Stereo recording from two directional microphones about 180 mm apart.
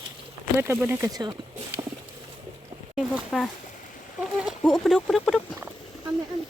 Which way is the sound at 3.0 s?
Centre (ahead or behind).